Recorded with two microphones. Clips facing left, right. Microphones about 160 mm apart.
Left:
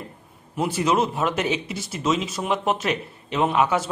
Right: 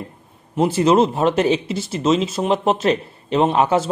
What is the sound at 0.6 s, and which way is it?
Speech, 25° right (ahead or behind).